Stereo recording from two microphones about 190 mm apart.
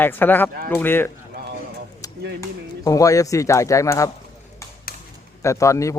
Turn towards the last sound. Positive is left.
turn(degrees=15)  # may be behind; listen again after turning